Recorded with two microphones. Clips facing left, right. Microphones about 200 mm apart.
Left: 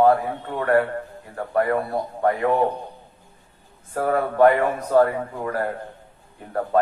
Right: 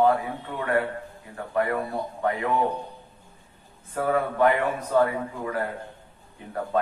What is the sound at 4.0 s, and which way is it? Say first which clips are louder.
Speech: left 5 dB; 45° left (ahead or behind).